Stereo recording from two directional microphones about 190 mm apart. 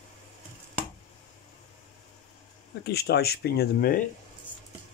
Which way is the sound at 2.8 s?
60° left (ahead or behind).